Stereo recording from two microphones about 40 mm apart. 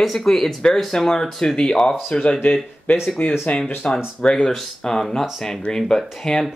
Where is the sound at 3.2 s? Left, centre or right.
Left.